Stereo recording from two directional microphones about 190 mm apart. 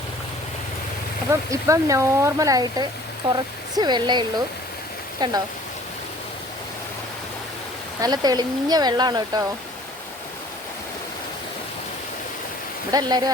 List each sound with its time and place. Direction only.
1.3 s speech: 15° right (ahead or behind)
8.0 s speech: 20° right (ahead or behind)
12.9 s speech: 20° right (ahead or behind)